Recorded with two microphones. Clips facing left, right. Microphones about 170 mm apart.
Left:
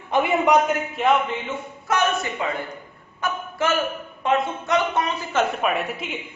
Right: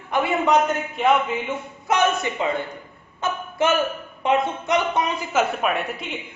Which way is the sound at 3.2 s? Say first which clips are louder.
Right 1 dB; 20° right (ahead or behind).